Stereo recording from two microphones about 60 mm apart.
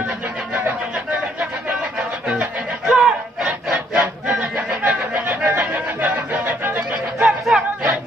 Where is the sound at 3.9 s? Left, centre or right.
Right.